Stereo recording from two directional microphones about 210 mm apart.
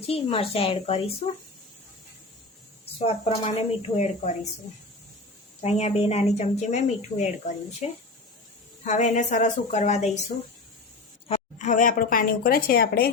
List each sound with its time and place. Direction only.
0.0 s a woman's voice: 25° left (ahead or behind)
3.0 s speech: 30° left (ahead or behind)
5.6 s speech: 30° left (ahead or behind)
11.3 s a woman's voice: 35° left (ahead or behind)